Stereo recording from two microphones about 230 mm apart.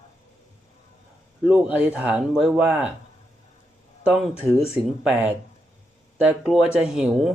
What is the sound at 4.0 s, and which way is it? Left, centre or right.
Speech, centre.